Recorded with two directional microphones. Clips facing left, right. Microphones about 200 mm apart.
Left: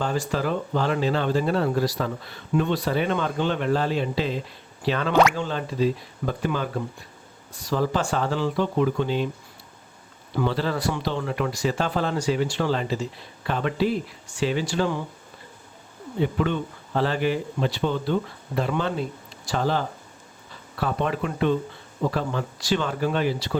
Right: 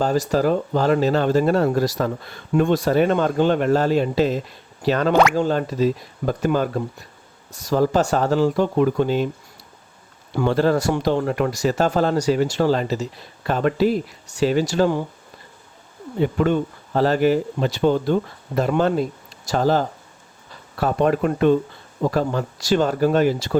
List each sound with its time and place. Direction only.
0.0 s speech: 40° right (ahead or behind)
10.3 s speech: 50° right (ahead or behind)
16.2 s speech: 45° right (ahead or behind)